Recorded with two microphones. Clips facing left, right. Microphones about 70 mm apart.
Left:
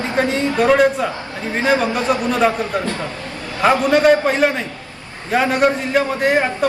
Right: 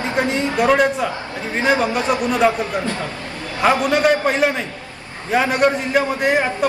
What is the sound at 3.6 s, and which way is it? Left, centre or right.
A man's voice, centre.